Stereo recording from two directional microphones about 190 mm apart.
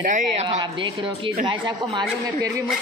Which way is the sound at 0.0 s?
40° right (ahead or behind).